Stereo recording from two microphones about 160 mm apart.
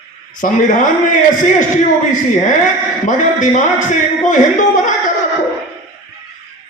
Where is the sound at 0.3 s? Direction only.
55° left (ahead or behind).